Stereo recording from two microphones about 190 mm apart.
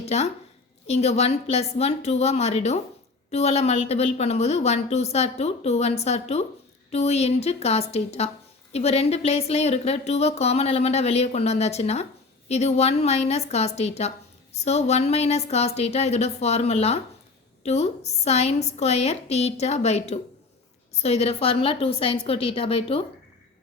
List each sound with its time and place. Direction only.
0.0 s a woman's voice: 35° left (ahead or behind)